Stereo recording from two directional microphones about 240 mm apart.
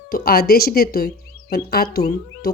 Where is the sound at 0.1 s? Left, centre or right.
Left.